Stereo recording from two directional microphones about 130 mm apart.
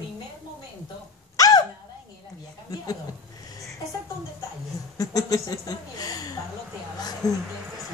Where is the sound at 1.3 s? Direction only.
30° left (ahead or behind).